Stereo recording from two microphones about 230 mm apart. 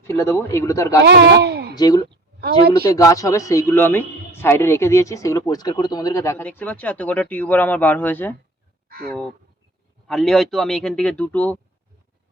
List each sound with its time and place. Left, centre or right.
0.1 s a man's voice: centre
1.0 s a man's voice: right
1.7 s a man's voice: centre
2.4 s a woman's voice: right
2.8 s a man's voice: centre